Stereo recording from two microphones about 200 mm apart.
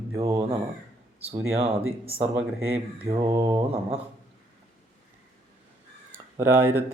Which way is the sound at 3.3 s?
20° right (ahead or behind).